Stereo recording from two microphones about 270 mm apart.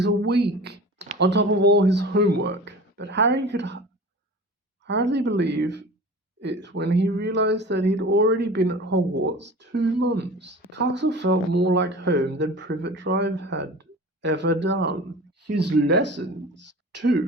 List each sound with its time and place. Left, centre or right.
0.0 s speech: right
4.9 s speech: right
15.4 s speech: right
15.9 s speech: right